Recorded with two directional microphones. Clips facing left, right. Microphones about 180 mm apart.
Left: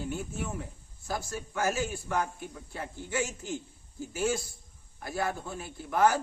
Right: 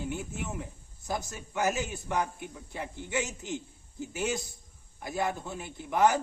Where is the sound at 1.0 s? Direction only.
20° right (ahead or behind).